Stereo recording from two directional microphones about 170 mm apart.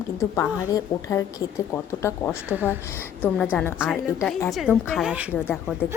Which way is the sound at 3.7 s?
5° right (ahead or behind).